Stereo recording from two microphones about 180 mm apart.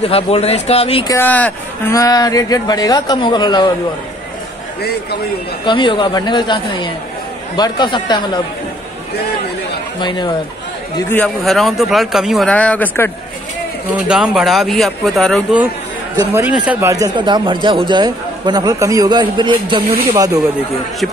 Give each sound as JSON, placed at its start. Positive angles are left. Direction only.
{"t": 0.0, "sound": "speech", "side_deg": 35}
{"t": 1.0, "sound": "speech", "side_deg": 10}
{"t": 2.0, "sound": "a man's voice", "side_deg": 20}
{"t": 5.7, "sound": "a man's voice", "side_deg": 25}
{"t": 9.9, "sound": "a man's voice", "side_deg": 25}
{"t": 11.1, "sound": "a man's voice", "side_deg": 5}
{"t": 13.9, "sound": "a man's voice", "side_deg": -5}
{"t": 16.9, "sound": "a man's voice", "side_deg": -20}